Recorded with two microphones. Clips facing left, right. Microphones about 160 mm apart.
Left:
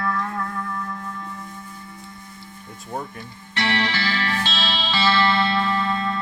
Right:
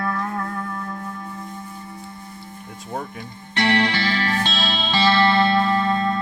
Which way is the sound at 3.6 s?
50° right (ahead or behind).